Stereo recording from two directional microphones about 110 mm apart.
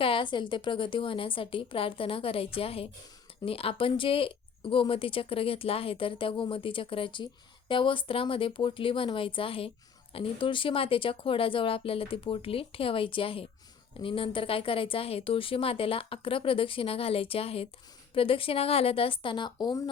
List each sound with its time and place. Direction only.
0.0 s a woman's voice: 50° left (ahead or behind)